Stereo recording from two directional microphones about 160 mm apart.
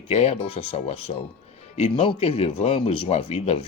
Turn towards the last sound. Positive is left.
turn(degrees=40)  # may be behind; listen again after turning